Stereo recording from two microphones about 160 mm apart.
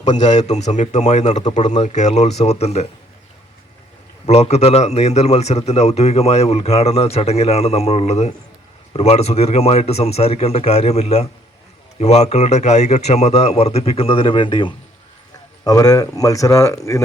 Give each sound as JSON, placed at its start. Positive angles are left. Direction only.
{"t": 0.3, "sound": "a man's voice", "side_deg": 45}
{"t": 4.3, "sound": "a man's voice", "side_deg": 40}